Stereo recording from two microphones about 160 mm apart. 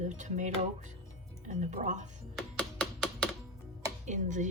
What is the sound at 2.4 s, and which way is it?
Music, 5° left (ahead or behind).